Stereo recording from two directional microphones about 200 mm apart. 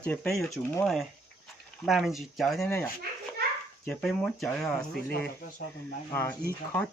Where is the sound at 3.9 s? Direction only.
Centre (ahead or behind).